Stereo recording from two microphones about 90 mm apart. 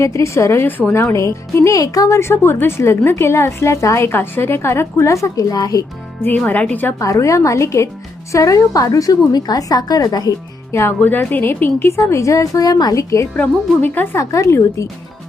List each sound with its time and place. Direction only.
0.0 s speech: 35° left (ahead or behind)
0.8 s speech: 20° left (ahead or behind)
1.1 s speech: 35° left (ahead or behind)
6.2 s speech: 20° left (ahead or behind)
7.0 s speech: 35° left (ahead or behind)
10.7 s speech: 30° left (ahead or behind)
13.3 s speech: 20° left (ahead or behind)
14.2 s speech: 35° left (ahead or behind)